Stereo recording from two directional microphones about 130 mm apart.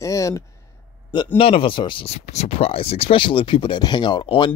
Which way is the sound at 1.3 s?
45° left (ahead or behind).